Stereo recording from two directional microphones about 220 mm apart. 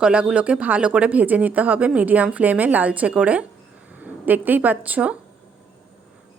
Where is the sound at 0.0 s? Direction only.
5° right (ahead or behind).